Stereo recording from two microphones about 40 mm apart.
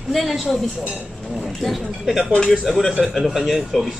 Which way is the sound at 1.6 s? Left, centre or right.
Centre.